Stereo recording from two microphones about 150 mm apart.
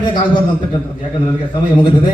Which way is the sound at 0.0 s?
30° left (ahead or behind).